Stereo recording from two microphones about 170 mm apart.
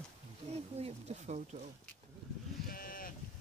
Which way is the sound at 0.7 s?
40° right (ahead or behind).